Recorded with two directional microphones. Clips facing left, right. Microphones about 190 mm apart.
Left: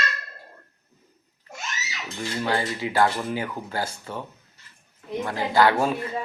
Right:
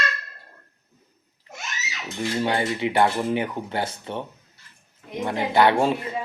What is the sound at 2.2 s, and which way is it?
Speech, 20° right (ahead or behind).